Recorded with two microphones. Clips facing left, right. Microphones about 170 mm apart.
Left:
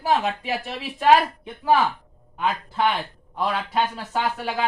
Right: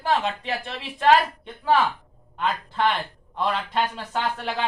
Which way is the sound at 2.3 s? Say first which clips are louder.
Left 1 dB; 5° left (ahead or behind).